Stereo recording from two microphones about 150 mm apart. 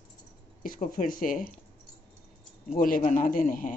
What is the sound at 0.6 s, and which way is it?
Speech, 65° left (ahead or behind).